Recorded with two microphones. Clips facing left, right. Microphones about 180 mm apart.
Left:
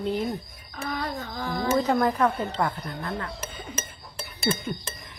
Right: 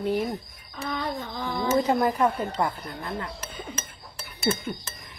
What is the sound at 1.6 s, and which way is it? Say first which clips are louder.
Speech: even; 20° right (ahead or behind).